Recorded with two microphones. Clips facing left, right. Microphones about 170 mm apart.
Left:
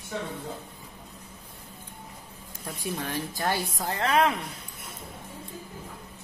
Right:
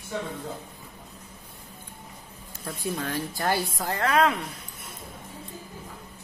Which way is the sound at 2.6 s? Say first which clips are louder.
Right 2 dB; 15° left (ahead or behind).